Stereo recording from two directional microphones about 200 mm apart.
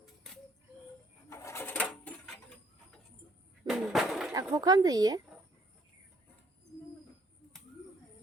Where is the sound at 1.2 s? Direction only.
15° left (ahead or behind).